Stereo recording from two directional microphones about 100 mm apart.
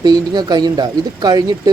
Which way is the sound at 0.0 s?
45° right (ahead or behind).